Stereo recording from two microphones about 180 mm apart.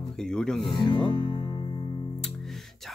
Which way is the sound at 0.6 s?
25° left (ahead or behind).